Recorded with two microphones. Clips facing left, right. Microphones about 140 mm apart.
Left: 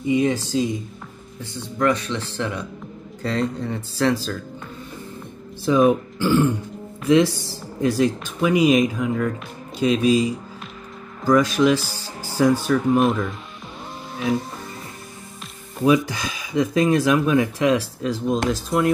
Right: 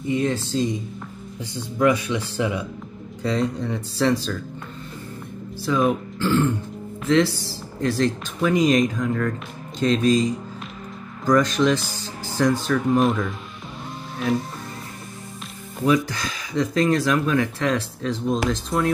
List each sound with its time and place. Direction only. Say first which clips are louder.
0.0 s speech: left 3 dB; 10° left (ahead or behind)
1.4 s speech: right 2 dB; 15° right (ahead or behind)
3.2 s speech: right 1 dB; centre (ahead or behind)
5.7 s speech: left 4 dB; 15° left (ahead or behind); by 14.4 s centre (ahead or behind)
15.8 s speech: left 2 dB; 20° left (ahead or behind); by 18.9 s centre (ahead or behind)